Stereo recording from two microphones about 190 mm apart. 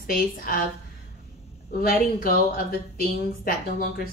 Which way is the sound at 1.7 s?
50° left (ahead or behind).